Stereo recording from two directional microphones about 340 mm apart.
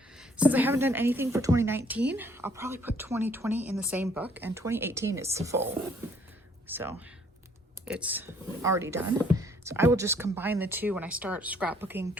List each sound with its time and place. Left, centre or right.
0.2 s a woman's voice: centre
6.7 s speech: centre